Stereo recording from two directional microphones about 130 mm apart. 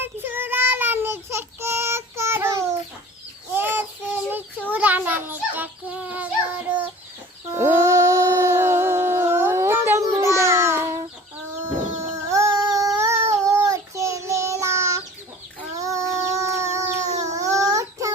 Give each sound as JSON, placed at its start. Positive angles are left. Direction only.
{"t": 0.0, "sound": "child singing", "side_deg": -15}
{"t": 4.7, "sound": "a sound", "side_deg": -15}
{"t": 13.5, "sound": "child singing", "side_deg": -20}
{"t": 15.8, "sound": "chicken", "side_deg": -25}
{"t": 17.3, "sound": "child singing", "side_deg": -25}